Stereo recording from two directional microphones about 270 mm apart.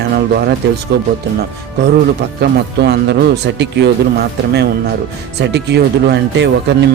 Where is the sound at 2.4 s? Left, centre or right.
Right.